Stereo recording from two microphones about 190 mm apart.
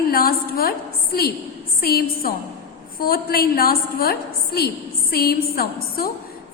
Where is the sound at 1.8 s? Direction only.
50° left (ahead or behind).